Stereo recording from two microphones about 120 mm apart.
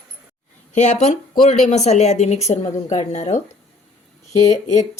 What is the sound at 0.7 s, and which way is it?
A woman's voice, 75° left (ahead or behind).